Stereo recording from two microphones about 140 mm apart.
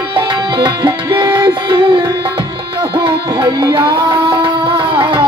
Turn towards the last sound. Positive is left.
turn(degrees=-40)  # may be behind; listen again after turning